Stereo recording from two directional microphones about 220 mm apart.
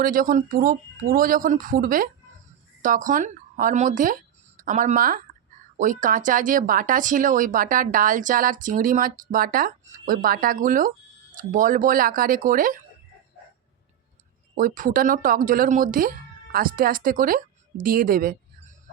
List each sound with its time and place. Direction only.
0.0 s speech: 40° right (ahead or behind)
14.5 s speech: 40° right (ahead or behind)